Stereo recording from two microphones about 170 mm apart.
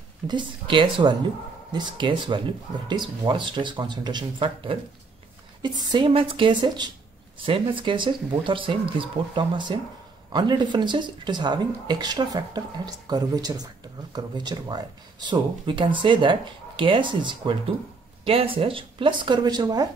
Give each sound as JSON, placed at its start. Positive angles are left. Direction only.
{"t": 0.3, "sound": "speech", "side_deg": -30}